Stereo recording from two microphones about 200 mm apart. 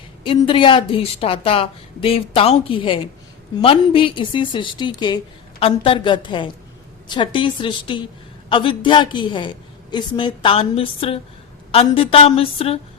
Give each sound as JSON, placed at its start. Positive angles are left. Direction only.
{"t": 0.3, "sound": "a woman's voice", "side_deg": 25}